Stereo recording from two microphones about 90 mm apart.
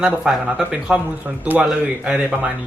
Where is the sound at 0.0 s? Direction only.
10° right (ahead or behind).